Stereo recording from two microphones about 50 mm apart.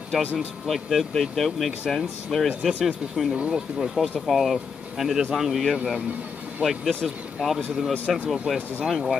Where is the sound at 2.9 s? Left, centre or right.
Centre.